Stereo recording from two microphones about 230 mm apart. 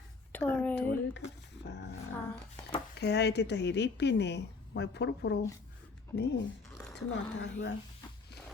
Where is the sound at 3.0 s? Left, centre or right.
Left.